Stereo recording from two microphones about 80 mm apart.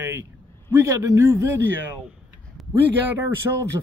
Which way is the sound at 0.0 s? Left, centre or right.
Right.